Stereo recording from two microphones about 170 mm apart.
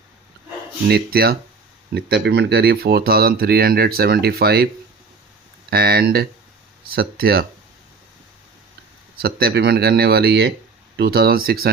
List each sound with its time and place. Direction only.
0.9 s speech: 65° right (ahead or behind)
2.0 s speech: 80° right
5.7 s speech: 65° right (ahead or behind)
9.1 s speech: 65° right (ahead or behind)